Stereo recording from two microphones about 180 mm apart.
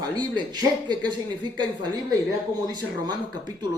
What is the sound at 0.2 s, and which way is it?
Speech, 25° right (ahead or behind).